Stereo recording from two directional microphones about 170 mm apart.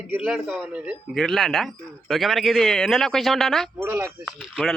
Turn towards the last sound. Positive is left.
turn(degrees=0)  # may be behind; listen again after turning